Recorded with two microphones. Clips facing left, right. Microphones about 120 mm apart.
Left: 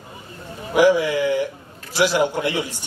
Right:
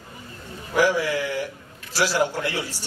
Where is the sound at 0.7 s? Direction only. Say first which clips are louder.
Left 5 dB; 20° left (ahead or behind).